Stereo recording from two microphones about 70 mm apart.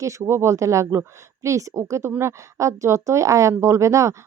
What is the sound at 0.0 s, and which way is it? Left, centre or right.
Speech, right.